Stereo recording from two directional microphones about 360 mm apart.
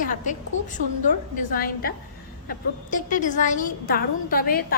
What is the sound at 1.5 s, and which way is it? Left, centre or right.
A woman's voice, left.